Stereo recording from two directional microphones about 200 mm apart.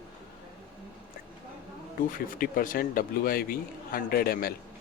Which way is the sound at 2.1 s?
45° left (ahead or behind).